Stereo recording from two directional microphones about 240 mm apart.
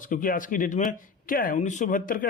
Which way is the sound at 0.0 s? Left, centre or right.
Left.